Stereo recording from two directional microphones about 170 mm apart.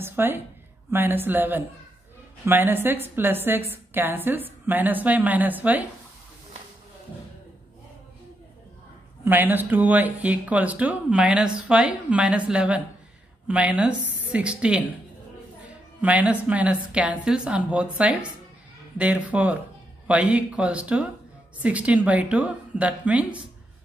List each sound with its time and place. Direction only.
0.0 s a woman's voice: 15° right (ahead or behind)
9.2 s speech: 10° right (ahead or behind)
16.0 s speech: 10° right (ahead or behind)